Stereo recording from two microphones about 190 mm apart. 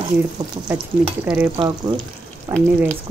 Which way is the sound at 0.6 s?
5° right (ahead or behind).